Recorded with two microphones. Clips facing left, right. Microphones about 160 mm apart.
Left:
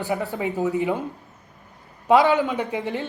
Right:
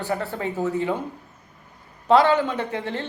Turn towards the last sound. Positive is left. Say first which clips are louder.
# left 1 dB
turn(degrees=15)  # may be behind; listen again after turning